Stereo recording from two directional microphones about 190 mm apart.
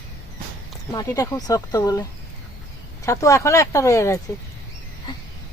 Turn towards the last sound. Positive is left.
turn(degrees=15)  # may be behind; listen again after turning